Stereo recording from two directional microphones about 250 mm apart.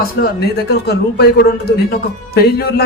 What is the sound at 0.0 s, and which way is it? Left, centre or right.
A man's voice, left.